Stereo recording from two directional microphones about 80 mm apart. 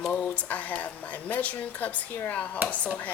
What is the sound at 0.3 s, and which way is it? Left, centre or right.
A woman's voice, centre.